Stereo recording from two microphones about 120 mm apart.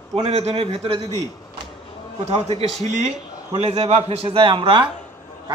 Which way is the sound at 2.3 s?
60° right (ahead or behind).